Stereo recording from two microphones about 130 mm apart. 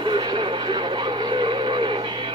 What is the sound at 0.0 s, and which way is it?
Radio, 35° right (ahead or behind).